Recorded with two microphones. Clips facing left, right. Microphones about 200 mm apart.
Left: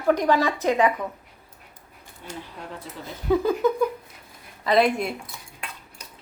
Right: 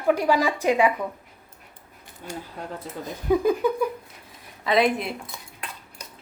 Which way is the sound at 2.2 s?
45° right (ahead or behind).